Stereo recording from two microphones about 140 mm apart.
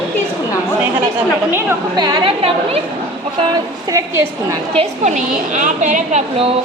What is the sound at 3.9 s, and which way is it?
Speech, 20° right (ahead or behind).